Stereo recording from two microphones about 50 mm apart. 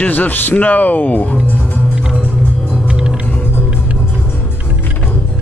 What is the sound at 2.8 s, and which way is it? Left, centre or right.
Music, centre.